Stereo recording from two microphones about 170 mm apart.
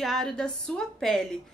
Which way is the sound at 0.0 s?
Centre (ahead or behind).